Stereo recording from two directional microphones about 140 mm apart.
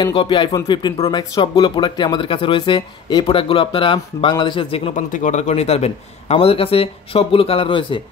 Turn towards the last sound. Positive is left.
turn(degrees=35)  # may be behind; listen again after turning